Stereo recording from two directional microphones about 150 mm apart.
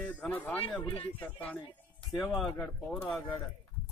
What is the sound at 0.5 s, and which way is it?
Speech, 40° left (ahead or behind).